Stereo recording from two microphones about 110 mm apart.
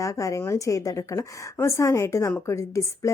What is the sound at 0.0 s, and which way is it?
A woman's voice, 30° left (ahead or behind).